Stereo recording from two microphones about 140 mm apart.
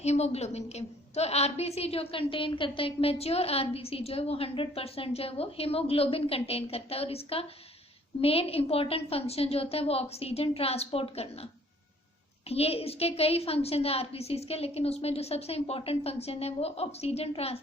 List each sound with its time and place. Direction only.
0.0 s a woman's voice: 50° left (ahead or behind)
12.5 s a woman's voice: 45° left (ahead or behind)